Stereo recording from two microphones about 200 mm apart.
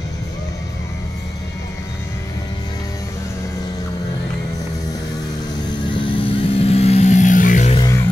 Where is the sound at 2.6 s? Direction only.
20° left (ahead or behind).